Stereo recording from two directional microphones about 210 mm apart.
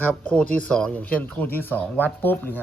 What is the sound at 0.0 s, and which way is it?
Speech, 5° left (ahead or behind).